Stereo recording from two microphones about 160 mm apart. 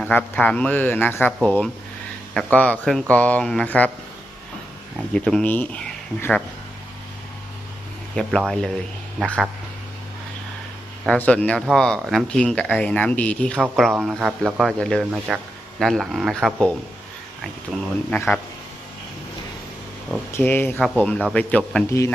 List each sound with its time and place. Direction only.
0.0 s speech: 10° left (ahead or behind)
5.1 s speech: 5° left (ahead or behind)
8.2 s speech: centre (ahead or behind)
11.1 s speech: 5° left (ahead or behind)
13.6 s speech: 5° right (ahead or behind)
14.1 s speech: 10° right (ahead or behind)
14.6 s speech: centre (ahead or behind)
18.1 s speech: 10° left (ahead or behind)
20.3 s speech: 15° left (ahead or behind)